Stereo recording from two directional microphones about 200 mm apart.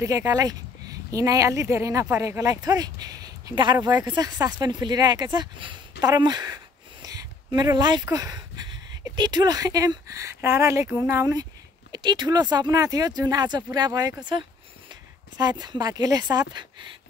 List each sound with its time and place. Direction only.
0.0 s a woman's voice: 15° right (ahead or behind)